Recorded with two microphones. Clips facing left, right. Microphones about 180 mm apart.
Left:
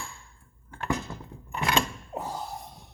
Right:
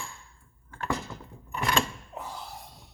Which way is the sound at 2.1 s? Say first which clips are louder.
Left 9 dB; 40° left (ahead or behind).